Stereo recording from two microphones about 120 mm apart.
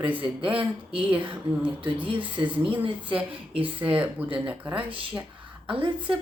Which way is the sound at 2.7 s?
45° right (ahead or behind).